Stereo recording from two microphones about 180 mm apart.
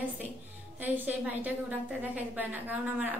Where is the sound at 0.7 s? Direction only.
10° right (ahead or behind).